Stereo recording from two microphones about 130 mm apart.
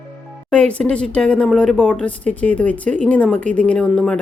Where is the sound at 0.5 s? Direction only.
10° left (ahead or behind).